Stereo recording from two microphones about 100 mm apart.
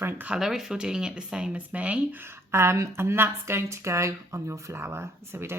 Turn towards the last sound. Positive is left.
turn(degrees=-25)  # may be behind; listen again after turning